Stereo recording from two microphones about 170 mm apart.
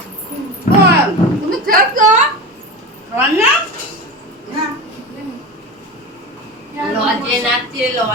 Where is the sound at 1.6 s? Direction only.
50° right (ahead or behind).